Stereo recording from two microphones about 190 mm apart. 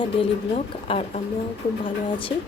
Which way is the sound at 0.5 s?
35° left (ahead or behind).